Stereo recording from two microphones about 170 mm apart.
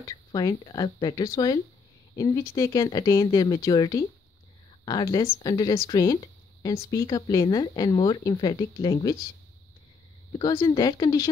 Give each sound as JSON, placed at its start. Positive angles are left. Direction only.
{"t": 0.0, "sound": "speech", "side_deg": 20}
{"t": 10.3, "sound": "speech", "side_deg": 20}